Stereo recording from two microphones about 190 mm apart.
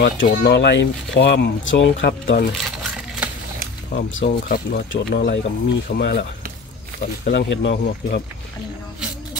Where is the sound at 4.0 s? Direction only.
80° left.